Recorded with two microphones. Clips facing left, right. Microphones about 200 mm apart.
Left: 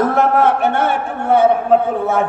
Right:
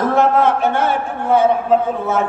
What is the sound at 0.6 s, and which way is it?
A man's voice, 55° left (ahead or behind).